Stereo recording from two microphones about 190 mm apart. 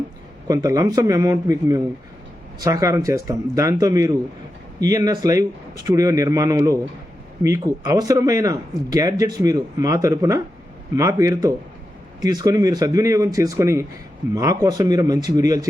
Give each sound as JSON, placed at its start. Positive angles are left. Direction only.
{"t": 0.4, "sound": "a man's voice", "side_deg": -20}